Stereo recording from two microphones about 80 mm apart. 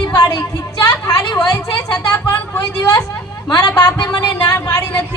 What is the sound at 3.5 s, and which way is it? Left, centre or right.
A man's voice, left.